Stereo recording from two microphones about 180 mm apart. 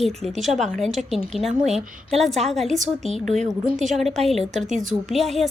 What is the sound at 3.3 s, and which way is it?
Speech, 40° right (ahead or behind).